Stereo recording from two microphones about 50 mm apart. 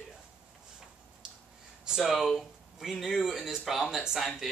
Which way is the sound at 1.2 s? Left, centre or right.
Centre.